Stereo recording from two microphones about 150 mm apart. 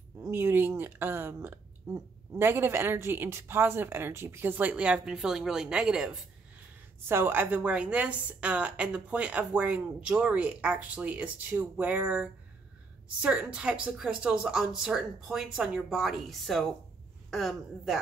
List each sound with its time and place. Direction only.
0.2 s a woman's voice: 15° right (ahead or behind); by 17.9 s centre (ahead or behind)